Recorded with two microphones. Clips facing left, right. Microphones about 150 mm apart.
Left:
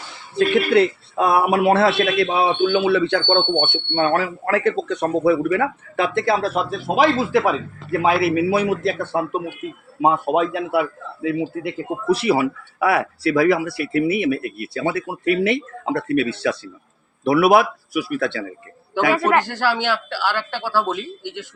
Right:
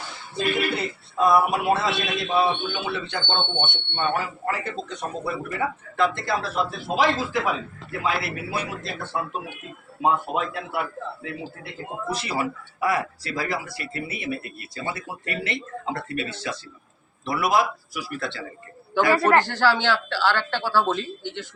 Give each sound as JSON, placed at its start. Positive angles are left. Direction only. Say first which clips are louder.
{"t": 0.3, "sound": "a man's voice", "louder": "left 9 dB", "side_deg": 70}
{"t": 19.2, "sound": "speech", "louder": "left 1 dB", "side_deg": 15}